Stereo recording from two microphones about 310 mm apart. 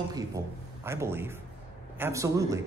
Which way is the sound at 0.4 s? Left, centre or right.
Centre.